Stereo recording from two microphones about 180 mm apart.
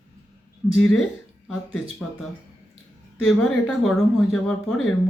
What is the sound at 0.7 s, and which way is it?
Speech, 5° left (ahead or behind).